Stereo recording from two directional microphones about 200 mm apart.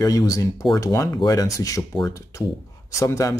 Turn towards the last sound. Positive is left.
turn(degrees=15)  # may be behind; listen again after turning